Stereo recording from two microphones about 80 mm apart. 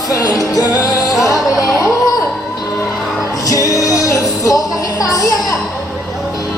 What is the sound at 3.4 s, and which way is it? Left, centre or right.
Music, left.